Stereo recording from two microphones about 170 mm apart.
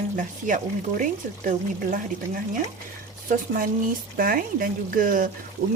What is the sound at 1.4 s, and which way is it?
Speech, 55° right (ahead or behind).